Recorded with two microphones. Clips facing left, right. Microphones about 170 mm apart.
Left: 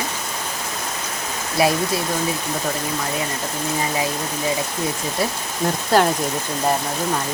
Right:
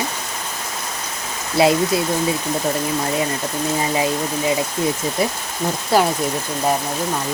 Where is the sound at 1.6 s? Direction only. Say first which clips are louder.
Right 3 dB; 25° right (ahead or behind).